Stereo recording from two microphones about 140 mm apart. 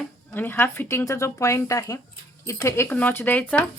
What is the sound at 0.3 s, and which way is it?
Speech, 15° left (ahead or behind).